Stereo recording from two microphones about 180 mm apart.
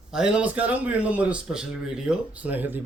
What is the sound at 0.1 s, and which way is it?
A man's voice, 5° right (ahead or behind).